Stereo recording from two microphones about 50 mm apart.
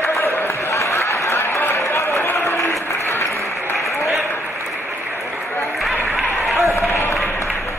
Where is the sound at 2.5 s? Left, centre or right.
Left.